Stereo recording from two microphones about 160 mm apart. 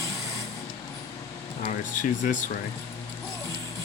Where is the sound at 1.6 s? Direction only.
50° left (ahead or behind).